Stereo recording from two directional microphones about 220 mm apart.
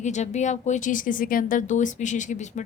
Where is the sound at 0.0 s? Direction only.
30° left (ahead or behind).